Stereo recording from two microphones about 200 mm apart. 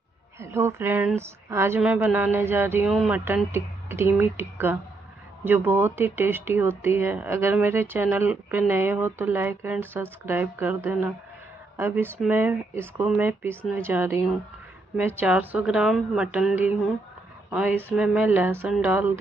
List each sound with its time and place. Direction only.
0.4 s a woman's voice: 15° right (ahead or behind)